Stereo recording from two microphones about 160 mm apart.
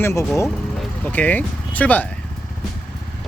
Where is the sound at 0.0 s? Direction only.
15° left (ahead or behind).